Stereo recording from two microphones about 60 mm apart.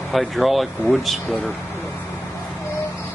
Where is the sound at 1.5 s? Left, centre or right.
Left.